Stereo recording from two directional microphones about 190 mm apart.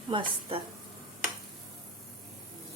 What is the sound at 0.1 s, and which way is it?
Speech, 25° right (ahead or behind).